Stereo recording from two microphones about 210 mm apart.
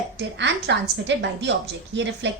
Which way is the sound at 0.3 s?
55° right (ahead or behind).